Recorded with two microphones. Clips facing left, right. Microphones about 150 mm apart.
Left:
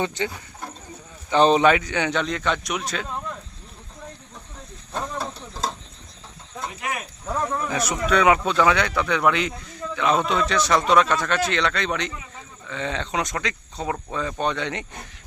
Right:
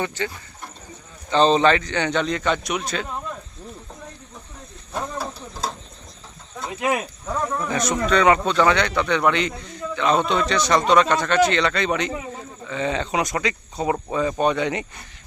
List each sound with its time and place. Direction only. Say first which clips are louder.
0.0 s speech: left 1 dB; 20° left (ahead or behind)
1.3 s speech: even; 15° left (ahead or behind)
4.9 s a sound: right 1 dB; 5° right (ahead or behind)
7.3 s speech: even; 5° left (ahead or behind)